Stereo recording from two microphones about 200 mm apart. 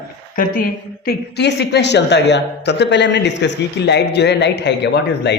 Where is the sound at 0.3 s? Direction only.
45° left (ahead or behind).